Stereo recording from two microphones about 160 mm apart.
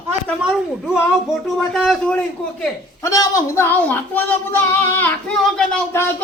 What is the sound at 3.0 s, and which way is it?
Speech, 20° left (ahead or behind).